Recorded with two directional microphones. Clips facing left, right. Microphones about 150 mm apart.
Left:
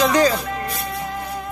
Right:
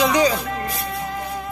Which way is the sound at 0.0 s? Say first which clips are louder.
Left 1 dB; 10° right (ahead or behind).